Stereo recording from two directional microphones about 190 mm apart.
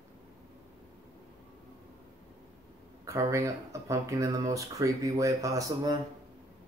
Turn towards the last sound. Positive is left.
turn(degrees=-15)  # may be behind; listen again after turning